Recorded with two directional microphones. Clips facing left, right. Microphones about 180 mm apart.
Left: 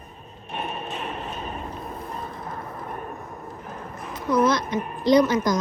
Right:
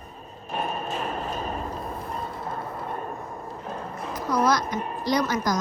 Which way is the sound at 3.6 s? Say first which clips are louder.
Right 5 dB; 30° right (ahead or behind).